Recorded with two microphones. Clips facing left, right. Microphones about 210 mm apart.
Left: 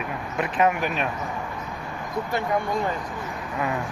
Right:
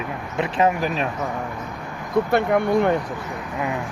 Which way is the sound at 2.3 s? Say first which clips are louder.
Right 6 dB; 65° right (ahead or behind).